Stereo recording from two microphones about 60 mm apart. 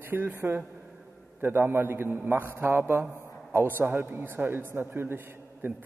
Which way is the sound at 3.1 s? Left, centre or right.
Left.